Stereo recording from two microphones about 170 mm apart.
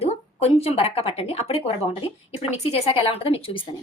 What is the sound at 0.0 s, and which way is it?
Speech, 35° left (ahead or behind).